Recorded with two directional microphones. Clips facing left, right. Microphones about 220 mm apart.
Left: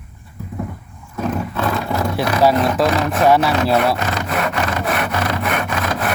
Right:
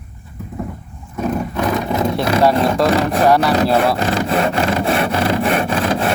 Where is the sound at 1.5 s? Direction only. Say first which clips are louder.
Right 2 dB; 15° right (ahead or behind).